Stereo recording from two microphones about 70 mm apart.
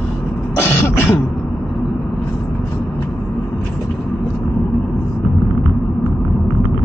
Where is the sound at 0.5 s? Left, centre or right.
Left.